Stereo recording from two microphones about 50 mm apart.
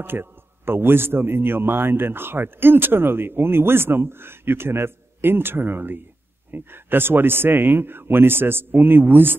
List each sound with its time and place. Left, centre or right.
0.0 s a man's voice: right